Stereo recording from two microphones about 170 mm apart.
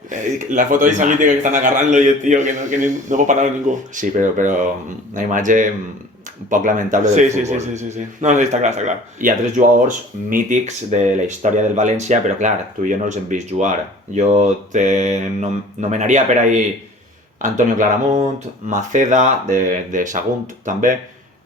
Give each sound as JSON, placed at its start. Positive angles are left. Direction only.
{"t": 0.1, "sound": "a man's voice", "side_deg": -50}